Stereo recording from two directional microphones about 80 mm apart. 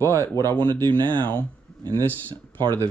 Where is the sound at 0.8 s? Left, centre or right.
Right.